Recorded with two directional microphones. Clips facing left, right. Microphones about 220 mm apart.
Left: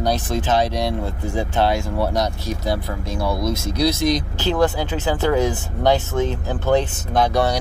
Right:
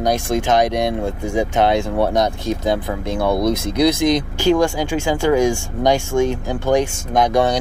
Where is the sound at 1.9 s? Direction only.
55° right (ahead or behind).